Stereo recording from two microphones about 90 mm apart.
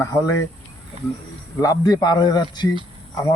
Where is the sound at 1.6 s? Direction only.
45° left (ahead or behind).